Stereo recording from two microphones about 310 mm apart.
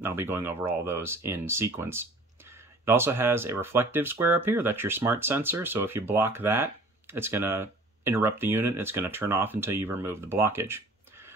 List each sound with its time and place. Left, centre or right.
0.0 s speech: centre